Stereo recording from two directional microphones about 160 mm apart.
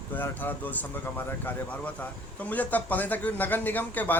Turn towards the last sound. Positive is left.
turn(degrees=10)  # may be behind; listen again after turning